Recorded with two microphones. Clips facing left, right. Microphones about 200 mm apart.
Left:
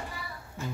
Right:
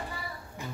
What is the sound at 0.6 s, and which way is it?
Music, 15° right (ahead or behind).